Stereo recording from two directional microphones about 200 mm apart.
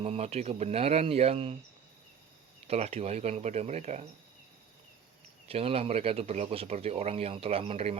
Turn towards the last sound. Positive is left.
turn(degrees=-30)  # may be behind; listen again after turning